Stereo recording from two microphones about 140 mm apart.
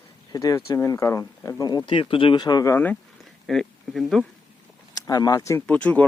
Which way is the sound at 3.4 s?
Centre (ahead or behind).